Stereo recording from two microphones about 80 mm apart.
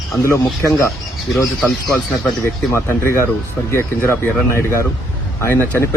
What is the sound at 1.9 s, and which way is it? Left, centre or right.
Speech, centre.